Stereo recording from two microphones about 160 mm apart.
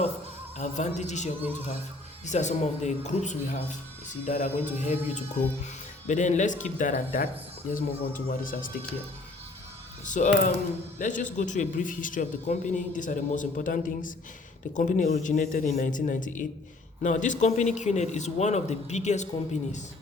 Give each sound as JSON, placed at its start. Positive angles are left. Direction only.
{"t": 0.5, "sound": "a man's voice", "side_deg": 45}
{"t": 10.1, "sound": "a man's voice", "side_deg": 50}